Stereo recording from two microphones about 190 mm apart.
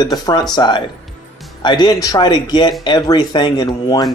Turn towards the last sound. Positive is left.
turn(degrees=20)  # may be behind; listen again after turning